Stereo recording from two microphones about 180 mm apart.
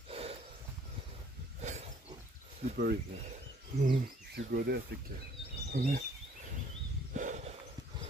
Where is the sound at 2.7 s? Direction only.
60° right (ahead or behind).